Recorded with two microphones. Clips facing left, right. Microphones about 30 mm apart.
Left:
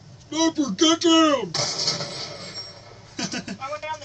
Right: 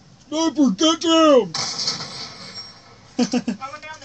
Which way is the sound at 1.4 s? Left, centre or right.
Centre.